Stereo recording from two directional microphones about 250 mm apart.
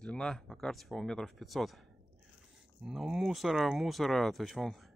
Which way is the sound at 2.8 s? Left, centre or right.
Centre.